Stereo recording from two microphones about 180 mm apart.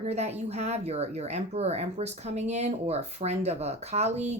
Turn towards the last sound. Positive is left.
turn(degrees=-40)  # may be behind; listen again after turning